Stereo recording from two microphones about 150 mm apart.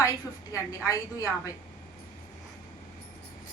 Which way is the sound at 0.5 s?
20° left (ahead or behind).